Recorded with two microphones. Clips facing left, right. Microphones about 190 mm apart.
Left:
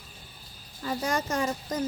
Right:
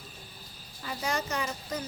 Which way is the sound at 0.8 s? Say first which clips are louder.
Left 4 dB; 50° left (ahead or behind).